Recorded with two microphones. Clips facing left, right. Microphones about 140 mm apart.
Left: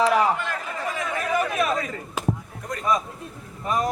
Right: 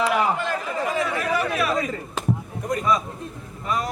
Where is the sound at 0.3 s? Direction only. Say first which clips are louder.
Right 4 dB; 30° right (ahead or behind).